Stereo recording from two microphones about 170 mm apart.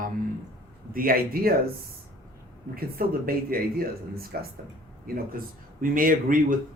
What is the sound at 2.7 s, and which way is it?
Speech, 60° right (ahead or behind).